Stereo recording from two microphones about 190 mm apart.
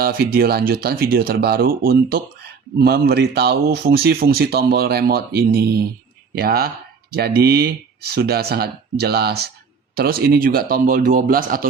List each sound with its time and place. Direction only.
0.0 s speech: 50° right (ahead or behind)